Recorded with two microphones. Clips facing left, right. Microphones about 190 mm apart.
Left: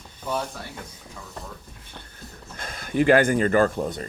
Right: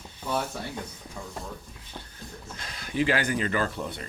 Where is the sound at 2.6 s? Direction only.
50° left (ahead or behind).